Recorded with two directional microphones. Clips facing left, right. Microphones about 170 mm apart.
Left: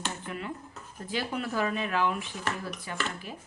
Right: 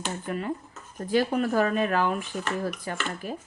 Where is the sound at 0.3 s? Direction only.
45° right (ahead or behind).